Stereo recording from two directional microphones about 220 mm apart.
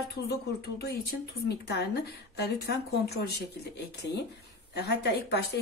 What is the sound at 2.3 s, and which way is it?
Speech, 50° left (ahead or behind).